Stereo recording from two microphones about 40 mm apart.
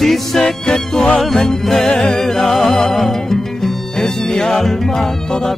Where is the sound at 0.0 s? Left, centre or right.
Centre.